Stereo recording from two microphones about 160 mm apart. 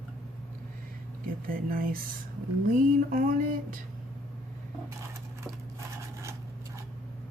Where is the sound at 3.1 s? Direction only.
60° right (ahead or behind).